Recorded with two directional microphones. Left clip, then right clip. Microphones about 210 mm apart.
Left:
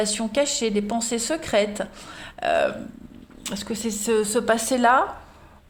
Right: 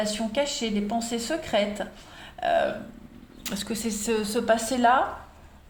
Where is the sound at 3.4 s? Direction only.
20° left (ahead or behind).